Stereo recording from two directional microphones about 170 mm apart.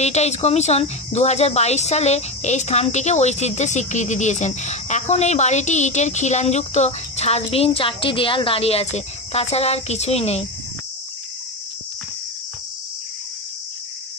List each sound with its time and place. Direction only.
0.0 s speech: 40° left (ahead or behind)